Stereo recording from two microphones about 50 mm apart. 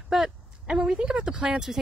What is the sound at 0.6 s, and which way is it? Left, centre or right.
Speech, centre.